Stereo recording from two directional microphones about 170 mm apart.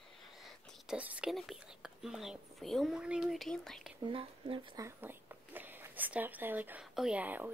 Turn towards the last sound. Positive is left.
turn(degrees=-10)  # may be behind; listen again after turning